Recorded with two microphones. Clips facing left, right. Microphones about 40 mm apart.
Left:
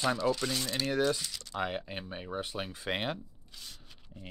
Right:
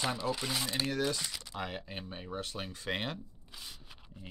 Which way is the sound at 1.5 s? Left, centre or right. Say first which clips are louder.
Left 6 dB; centre.